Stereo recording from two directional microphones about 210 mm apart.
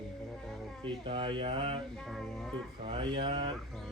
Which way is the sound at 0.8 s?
25° right (ahead or behind).